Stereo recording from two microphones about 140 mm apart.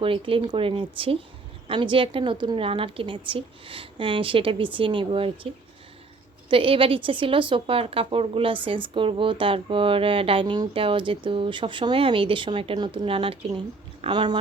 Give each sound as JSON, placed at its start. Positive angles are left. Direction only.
{"t": 0.0, "sound": "a woman's voice", "side_deg": -40}
{"t": 6.5, "sound": "a woman's voice", "side_deg": -40}